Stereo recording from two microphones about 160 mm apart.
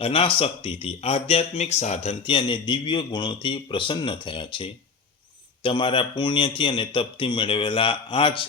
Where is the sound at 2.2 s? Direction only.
30° left (ahead or behind).